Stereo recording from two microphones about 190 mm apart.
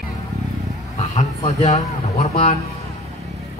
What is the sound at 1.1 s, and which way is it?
Speech, 35° left (ahead or behind).